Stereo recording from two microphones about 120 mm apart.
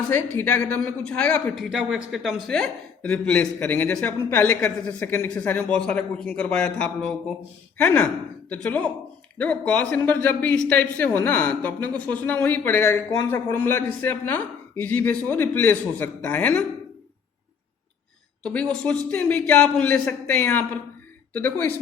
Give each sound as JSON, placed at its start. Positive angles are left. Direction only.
{"t": 0.1, "sound": "a man's voice", "side_deg": 20}
{"t": 1.5, "sound": "a man's voice", "side_deg": -5}
{"t": 2.5, "sound": "a man's voice", "side_deg": 10}
{"t": 18.5, "sound": "a man's voice", "side_deg": 10}